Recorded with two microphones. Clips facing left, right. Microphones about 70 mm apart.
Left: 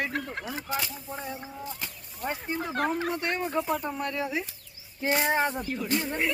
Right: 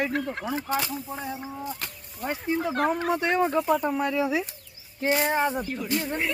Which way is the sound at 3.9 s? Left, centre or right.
Right.